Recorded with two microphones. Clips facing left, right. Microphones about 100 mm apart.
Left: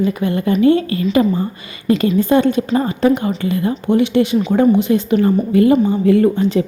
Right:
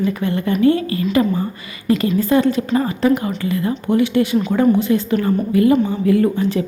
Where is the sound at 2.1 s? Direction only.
20° left (ahead or behind).